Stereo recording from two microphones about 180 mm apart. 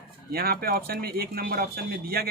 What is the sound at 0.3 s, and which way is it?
Speech, 55° right (ahead or behind).